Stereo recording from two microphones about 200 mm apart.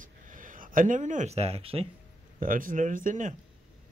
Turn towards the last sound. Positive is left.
turn(degrees=-40)  # may be behind; listen again after turning